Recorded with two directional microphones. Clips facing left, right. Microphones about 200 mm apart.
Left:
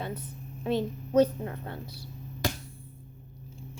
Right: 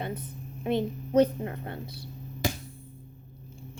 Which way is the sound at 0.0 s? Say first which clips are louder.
Right 1 dB; 55° right (ahead or behind).